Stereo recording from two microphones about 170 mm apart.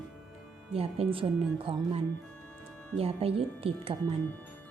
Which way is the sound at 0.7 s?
35° right (ahead or behind).